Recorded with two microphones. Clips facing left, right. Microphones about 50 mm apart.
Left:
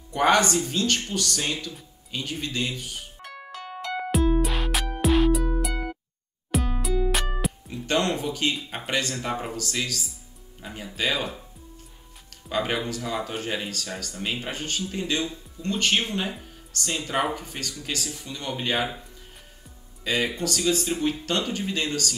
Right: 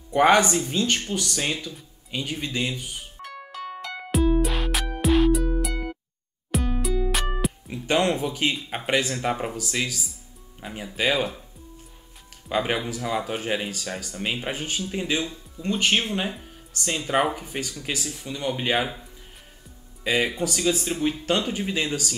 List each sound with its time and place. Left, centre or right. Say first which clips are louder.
0.1 s speech: right 3 dB; centre
3.2 s music: right 3 dB; centre
7.7 s speech: right 2 dB; centre
12.4 s speech: right 1 dB; centre
20.0 s speech: right 2 dB; centre